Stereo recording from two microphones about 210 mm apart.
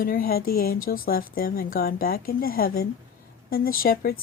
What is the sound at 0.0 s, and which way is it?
Speech, 45° left (ahead or behind).